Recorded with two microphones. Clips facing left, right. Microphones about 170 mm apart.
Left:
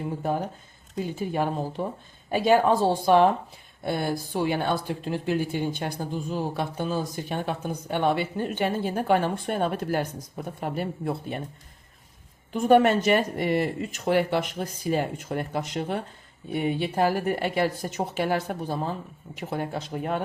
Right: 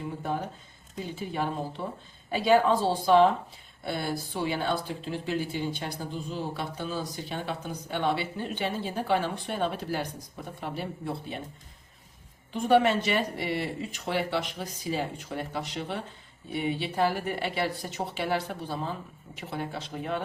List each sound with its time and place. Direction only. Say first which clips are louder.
0.9 s speech: left 5 dB; 45° left (ahead or behind)
12.5 s speech: left 4 dB; 45° left (ahead or behind)